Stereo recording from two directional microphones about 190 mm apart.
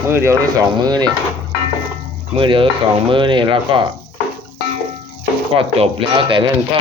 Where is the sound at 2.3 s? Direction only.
25° right (ahead or behind).